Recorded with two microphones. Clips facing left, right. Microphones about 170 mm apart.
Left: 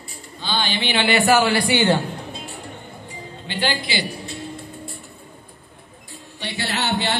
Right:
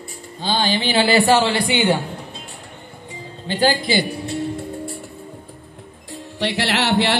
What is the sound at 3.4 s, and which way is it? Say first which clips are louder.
Speech: right 7 dB; 40° right (ahead or behind).